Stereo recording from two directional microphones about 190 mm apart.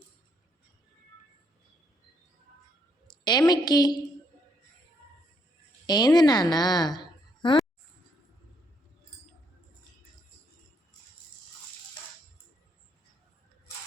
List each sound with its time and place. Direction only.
3.1 s a woman's voice: 20° left (ahead or behind)
5.8 s a woman's voice: 20° left (ahead or behind)